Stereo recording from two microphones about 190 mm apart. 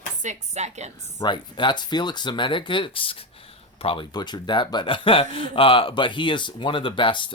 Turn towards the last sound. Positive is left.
turn(degrees=25)  # may be behind; listen again after turning